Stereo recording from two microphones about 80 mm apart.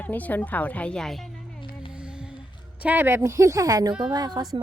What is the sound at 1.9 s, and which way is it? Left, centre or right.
Music, centre.